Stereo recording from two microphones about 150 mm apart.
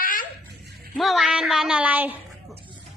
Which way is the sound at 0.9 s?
Centre (ahead or behind).